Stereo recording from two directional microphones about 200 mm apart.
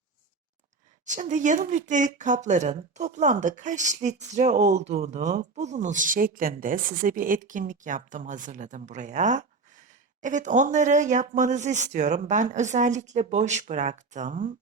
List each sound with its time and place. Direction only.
1.0 s speech: 40° right (ahead or behind)